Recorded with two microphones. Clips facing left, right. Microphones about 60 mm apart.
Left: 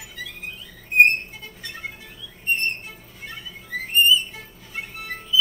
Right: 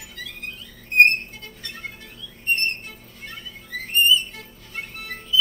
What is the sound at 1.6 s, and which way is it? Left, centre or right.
Music, centre.